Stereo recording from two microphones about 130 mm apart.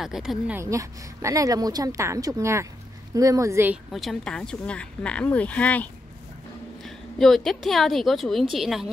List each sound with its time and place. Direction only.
0.0 s a woman's voice: 5° right (ahead or behind)
0.6 s speech: 25° right (ahead or behind)
3.7 s a woman's voice: centre (ahead or behind)